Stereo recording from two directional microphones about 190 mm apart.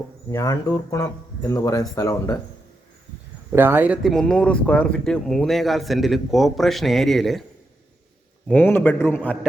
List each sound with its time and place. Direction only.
0.3 s speech: 15° left (ahead or behind)
3.5 s speech: 10° right (ahead or behind)
8.4 s speech: 10° left (ahead or behind)